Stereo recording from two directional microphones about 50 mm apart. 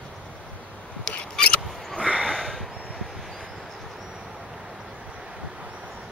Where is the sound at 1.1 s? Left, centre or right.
Left.